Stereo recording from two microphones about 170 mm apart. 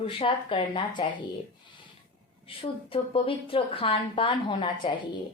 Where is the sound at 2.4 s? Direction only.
30° left (ahead or behind).